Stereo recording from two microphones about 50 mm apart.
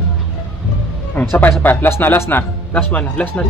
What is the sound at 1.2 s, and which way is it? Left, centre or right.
Speech, left.